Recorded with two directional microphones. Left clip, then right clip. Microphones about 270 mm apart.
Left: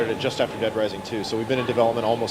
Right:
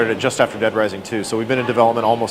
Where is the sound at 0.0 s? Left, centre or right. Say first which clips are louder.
Right 7 dB; centre.